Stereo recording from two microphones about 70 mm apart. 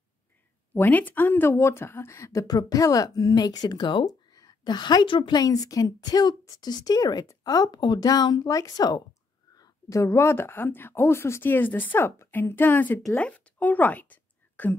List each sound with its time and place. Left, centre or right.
0.7 s a woman's voice: left
2.4 s speech: left
9.6 s a woman's voice: left